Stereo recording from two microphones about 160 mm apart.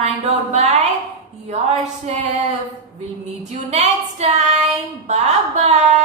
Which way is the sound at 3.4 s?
45° right (ahead or behind).